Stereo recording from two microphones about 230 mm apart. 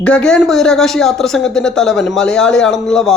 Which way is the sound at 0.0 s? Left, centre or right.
Centre.